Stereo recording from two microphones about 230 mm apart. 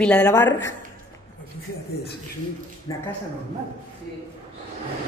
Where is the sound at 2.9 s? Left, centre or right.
Centre.